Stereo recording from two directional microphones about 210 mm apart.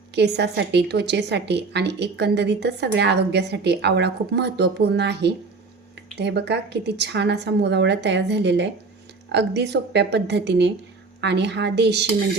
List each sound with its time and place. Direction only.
0.1 s a woman's voice: 55° right (ahead or behind)